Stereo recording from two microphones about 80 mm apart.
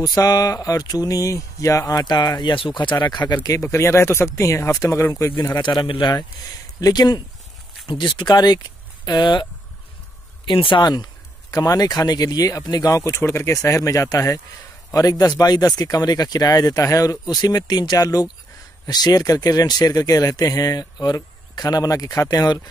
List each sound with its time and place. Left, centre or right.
0.2 s speech: left
3.6 s speech: left
5.6 s speech: left
6.8 s speech: left
7.8 s speech: left
10.4 s speech: left
11.5 s speech: left